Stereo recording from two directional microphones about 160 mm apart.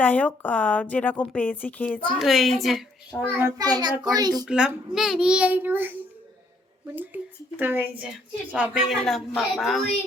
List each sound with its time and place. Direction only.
0.0 s a woman's voice: 10° left (ahead or behind)
3.3 s child singing: 20° right (ahead or behind)
4.4 s a child's voice: 5° right (ahead or behind)
6.9 s a child's voice: 10° right (ahead or behind)